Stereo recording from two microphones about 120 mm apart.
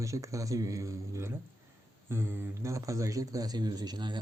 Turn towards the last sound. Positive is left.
turn(degrees=-40)  # may be behind; listen again after turning